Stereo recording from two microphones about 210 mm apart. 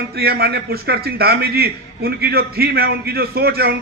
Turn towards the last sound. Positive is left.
turn(degrees=-45)  # may be behind; listen again after turning